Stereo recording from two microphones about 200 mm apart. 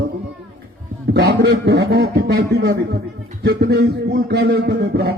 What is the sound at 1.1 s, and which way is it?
A man's voice, 55° right (ahead or behind).